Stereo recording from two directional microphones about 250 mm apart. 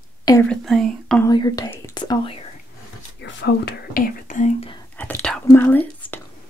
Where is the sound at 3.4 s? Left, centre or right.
Left.